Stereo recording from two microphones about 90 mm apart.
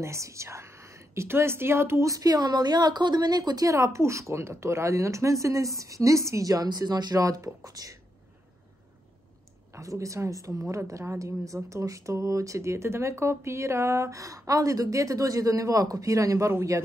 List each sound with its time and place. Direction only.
0.0 s speech: 35° right (ahead or behind)
9.8 s speech: 35° right (ahead or behind)